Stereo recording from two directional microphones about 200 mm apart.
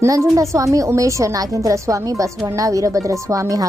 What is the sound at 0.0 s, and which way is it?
A woman's voice, 15° right (ahead or behind).